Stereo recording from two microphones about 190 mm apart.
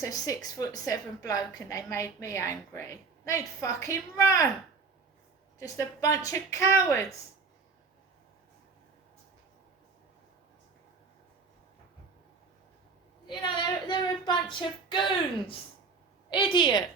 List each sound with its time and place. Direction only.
0.0 s a woman's voice: 15° left (ahead or behind)
5.5 s a woman's voice: 20° left (ahead or behind)
13.2 s female singing: 25° left (ahead or behind)
16.3 s female singing: 25° left (ahead or behind)